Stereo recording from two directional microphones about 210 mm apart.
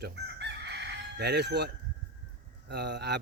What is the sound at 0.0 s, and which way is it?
Chicken, 55° right (ahead or behind).